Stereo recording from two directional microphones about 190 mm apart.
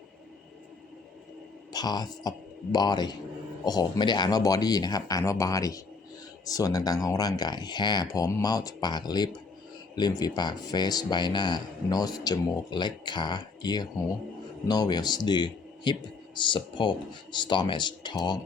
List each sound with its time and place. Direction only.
1.7 s speech: 20° left (ahead or behind)